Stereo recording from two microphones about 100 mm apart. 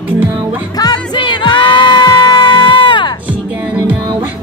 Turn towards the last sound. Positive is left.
turn(degrees=50)  # may be behind; listen again after turning